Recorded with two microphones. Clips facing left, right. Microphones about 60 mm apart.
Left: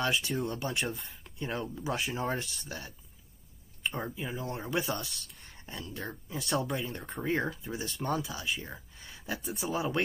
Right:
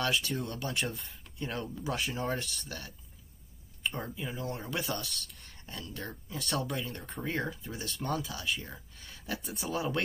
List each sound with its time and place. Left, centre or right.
0.0 s speech: centre
0.6 s speech: centre
0.9 s speech: centre
3.8 s speech: centre
9.0 s a sound: centre
9.4 s speech: centre